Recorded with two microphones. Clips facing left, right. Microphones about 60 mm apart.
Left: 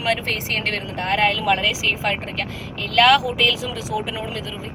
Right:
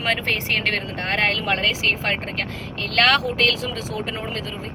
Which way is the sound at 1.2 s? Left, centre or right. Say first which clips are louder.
Left 4 dB; right.